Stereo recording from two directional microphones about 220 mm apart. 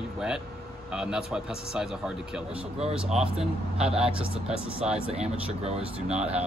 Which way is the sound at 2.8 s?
30° right (ahead or behind).